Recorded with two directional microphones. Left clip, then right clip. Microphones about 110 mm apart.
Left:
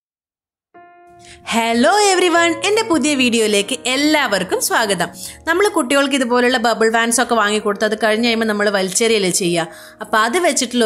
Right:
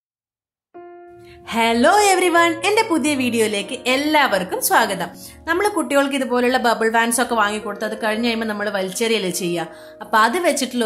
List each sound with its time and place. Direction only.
1.4 s a woman's voice: 35° left (ahead or behind)